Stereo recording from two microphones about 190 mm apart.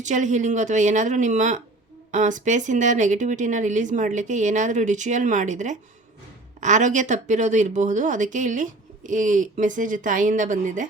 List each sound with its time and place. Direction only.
0.0 s speech: 40° right (ahead or behind)